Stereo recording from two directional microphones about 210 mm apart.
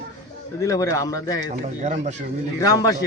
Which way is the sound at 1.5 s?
35° right (ahead or behind).